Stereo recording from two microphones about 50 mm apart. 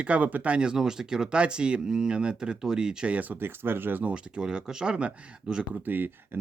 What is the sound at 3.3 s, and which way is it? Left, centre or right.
Speech, right.